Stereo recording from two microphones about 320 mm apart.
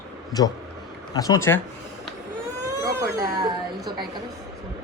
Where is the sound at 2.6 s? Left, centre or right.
Centre.